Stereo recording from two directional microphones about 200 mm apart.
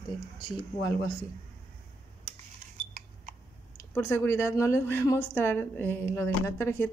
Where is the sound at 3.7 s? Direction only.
10° left (ahead or behind).